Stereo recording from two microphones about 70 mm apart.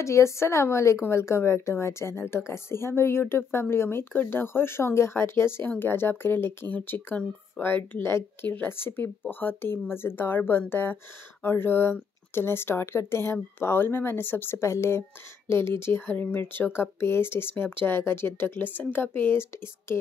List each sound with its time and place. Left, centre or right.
0.0 s a woman's voice: left